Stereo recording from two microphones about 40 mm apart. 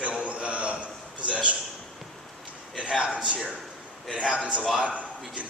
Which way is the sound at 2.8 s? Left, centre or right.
Right.